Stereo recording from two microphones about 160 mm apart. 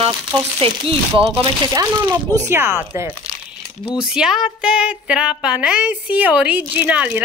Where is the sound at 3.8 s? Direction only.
5° right (ahead or behind).